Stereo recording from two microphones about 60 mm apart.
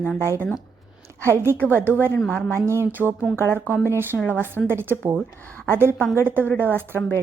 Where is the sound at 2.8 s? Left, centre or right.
Right.